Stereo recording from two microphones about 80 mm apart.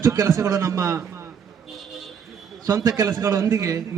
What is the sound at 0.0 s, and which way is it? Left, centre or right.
Speech, right.